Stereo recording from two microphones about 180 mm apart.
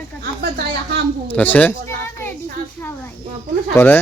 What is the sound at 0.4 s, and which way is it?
Speech, 65° right (ahead or behind).